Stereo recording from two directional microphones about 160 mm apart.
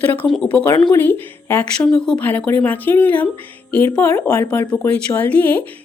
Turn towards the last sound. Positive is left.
turn(degrees=10)  # may be behind; listen again after turning